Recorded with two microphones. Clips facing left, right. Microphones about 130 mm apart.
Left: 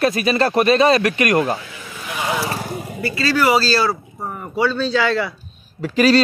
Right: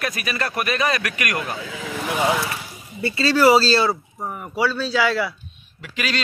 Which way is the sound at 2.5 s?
55° left (ahead or behind).